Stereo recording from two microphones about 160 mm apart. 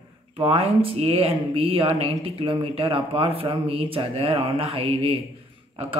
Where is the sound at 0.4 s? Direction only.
35° right (ahead or behind).